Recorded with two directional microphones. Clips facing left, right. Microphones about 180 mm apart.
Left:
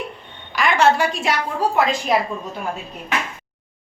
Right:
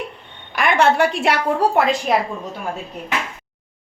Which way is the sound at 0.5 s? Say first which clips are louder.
Right 1 dB; 55° right (ahead or behind).